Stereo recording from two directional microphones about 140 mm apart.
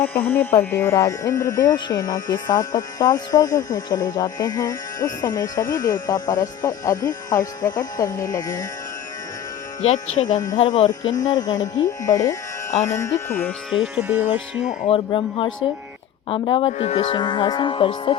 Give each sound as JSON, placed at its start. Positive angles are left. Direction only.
{"t": 0.0, "sound": "speech", "side_deg": 15}
{"t": 10.2, "sound": "speech", "side_deg": 30}
{"t": 13.7, "sound": "speech", "side_deg": 0}
{"t": 14.8, "sound": "speech", "side_deg": 40}
{"t": 17.2, "sound": "speech", "side_deg": 35}